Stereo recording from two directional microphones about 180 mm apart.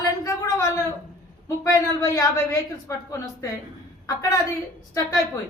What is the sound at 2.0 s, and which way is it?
A man's voice, 20° left (ahead or behind).